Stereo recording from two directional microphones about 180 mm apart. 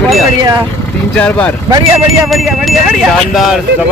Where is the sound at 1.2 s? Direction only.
5° left (ahead or behind).